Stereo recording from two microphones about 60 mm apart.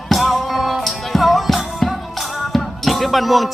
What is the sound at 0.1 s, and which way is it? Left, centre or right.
Music, centre.